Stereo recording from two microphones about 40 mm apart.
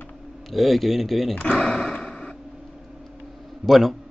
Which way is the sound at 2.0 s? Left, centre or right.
Centre.